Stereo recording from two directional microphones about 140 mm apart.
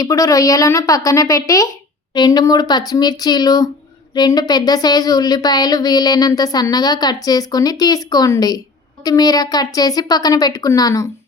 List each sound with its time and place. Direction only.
0.0 s speech: 25° left (ahead or behind)